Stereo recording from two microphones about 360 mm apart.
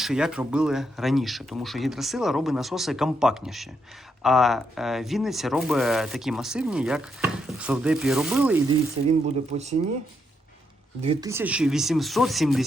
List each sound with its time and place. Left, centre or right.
0.0 s speech: centre
9.5 s speech: centre
11.0 s speech: centre